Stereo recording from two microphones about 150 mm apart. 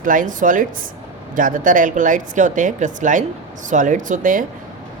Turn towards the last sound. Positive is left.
turn(degrees=-60)  # may be behind; listen again after turning